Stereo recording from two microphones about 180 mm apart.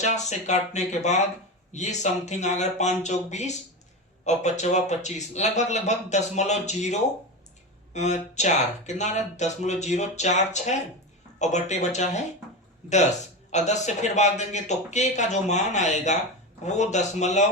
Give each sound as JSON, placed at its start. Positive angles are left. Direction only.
{"t": 0.0, "sound": "speech", "side_deg": 40}
{"t": 13.5, "sound": "speech", "side_deg": 40}